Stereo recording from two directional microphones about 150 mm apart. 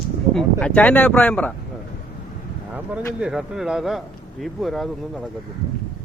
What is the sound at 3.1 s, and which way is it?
Speech, 5° right (ahead or behind).